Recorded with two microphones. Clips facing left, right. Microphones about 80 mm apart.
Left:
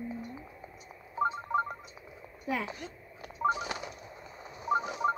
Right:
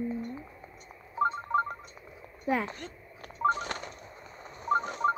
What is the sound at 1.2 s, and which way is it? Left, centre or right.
Ringtone, centre.